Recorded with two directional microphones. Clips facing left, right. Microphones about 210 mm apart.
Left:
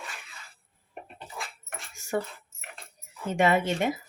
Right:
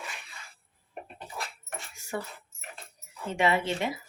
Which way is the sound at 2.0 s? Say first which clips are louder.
Left 6 dB; 45° left (ahead or behind).